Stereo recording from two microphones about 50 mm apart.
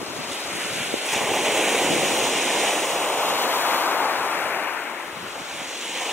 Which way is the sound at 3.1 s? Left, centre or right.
Left.